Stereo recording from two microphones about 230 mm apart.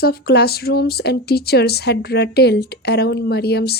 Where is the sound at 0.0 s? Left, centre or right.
Left.